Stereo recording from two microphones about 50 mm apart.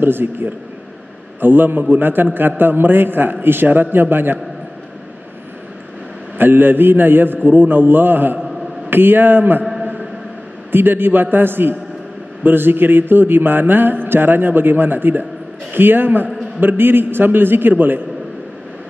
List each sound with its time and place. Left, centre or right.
0.0 s a man's voice: right
6.3 s a man's voice: right
10.7 s a man's voice: right